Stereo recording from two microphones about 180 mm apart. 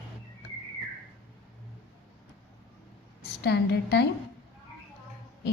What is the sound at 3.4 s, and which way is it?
Speech, 70° left (ahead or behind).